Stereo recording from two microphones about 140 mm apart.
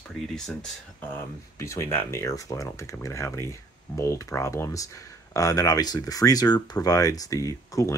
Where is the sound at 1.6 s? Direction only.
20° left (ahead or behind).